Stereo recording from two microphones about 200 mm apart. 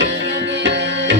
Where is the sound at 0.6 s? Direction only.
60° right (ahead or behind).